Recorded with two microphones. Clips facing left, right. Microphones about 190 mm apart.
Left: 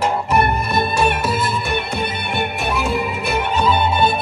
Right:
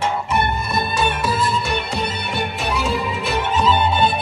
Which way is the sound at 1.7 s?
55° left (ahead or behind).